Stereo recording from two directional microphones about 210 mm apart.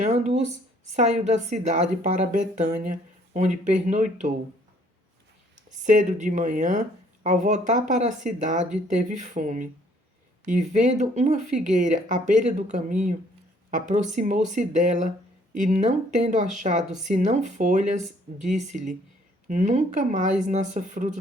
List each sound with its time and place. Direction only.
0.0 s a woman's voice: 35° right (ahead or behind)
5.5 s a woman's voice: 35° right (ahead or behind)